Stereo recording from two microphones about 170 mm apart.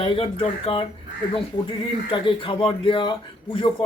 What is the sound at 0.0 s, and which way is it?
Speech, 30° left (ahead or behind).